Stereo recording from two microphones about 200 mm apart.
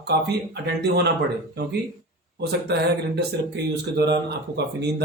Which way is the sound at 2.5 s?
55° right (ahead or behind).